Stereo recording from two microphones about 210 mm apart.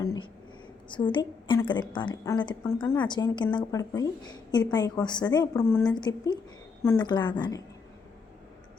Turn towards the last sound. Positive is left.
turn(degrees=20)  # may be behind; listen again after turning